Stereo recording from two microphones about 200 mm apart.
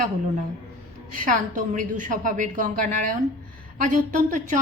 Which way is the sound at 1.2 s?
40° right (ahead or behind).